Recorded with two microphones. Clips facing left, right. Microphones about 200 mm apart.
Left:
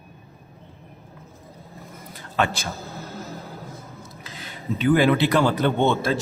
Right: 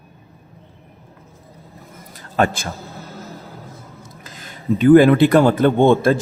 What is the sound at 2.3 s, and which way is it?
Speech, 45° right (ahead or behind).